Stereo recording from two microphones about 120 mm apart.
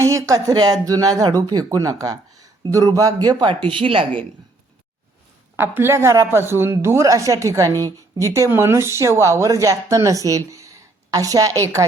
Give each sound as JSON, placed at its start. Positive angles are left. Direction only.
{"t": 0.1, "sound": "speech", "side_deg": -25}
{"t": 5.5, "sound": "speech", "side_deg": -20}